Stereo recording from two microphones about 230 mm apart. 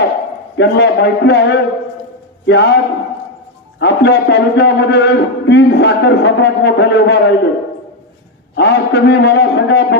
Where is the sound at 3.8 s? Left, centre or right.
Left.